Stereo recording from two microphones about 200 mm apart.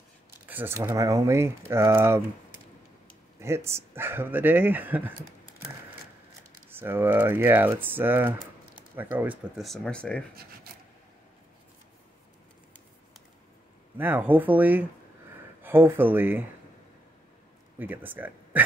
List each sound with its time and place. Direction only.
0.5 s speech: 10° right (ahead or behind)
3.3 s speech: 15° right (ahead or behind)
6.7 s speech: 10° right (ahead or behind); by 10.2 s 5° left (ahead or behind)
10.3 s speech: 50° right (ahead or behind)
13.9 s speech: 10° right (ahead or behind)
17.7 s speech: 10° right (ahead or behind)